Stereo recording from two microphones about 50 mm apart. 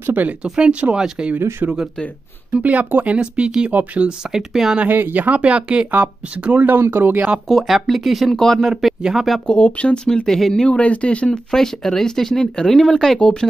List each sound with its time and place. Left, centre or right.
0.4 s speech: right
2.5 s speech: right
4.3 s speech: centre
4.8 s speech: right
5.9 s speech: right
6.8 s speech: right
7.4 s speech: centre
9.5 s speech: left
10.0 s speech: centre
10.8 s speech: left
11.5 s speech: centre